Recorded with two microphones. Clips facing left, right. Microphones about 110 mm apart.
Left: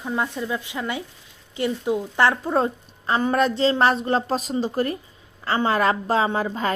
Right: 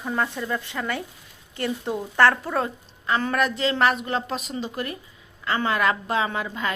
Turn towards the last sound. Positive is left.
turn(degrees=35)  # may be behind; listen again after turning